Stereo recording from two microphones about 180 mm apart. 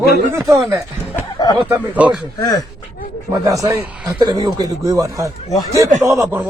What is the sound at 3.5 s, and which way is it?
A man's voice, 20° right (ahead or behind).